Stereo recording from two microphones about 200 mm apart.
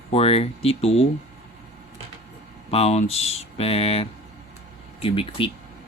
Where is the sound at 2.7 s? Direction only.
30° left (ahead or behind).